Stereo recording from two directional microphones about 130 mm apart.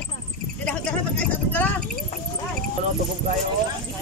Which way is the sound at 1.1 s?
10° left (ahead or behind).